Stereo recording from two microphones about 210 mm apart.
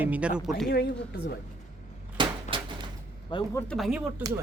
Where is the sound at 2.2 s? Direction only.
25° right (ahead or behind).